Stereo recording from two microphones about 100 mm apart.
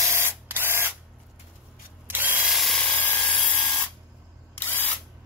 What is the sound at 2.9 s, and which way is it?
Tools, 15° left (ahead or behind).